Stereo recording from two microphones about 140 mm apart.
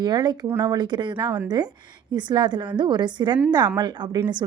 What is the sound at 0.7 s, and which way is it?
A woman's voice, 30° right (ahead or behind).